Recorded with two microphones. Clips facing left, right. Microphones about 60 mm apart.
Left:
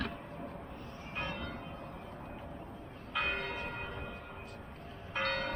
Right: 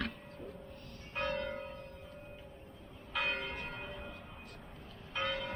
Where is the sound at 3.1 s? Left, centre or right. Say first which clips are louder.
Left 1 dB; centre.